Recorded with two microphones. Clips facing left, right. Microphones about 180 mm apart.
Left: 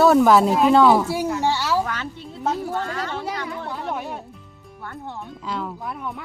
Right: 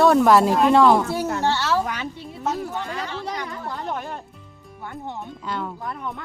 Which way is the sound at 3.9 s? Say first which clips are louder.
Left 2 dB; 5° left (ahead or behind).